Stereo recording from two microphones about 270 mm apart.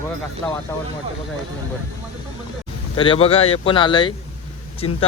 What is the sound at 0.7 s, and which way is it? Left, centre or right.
Speech, centre.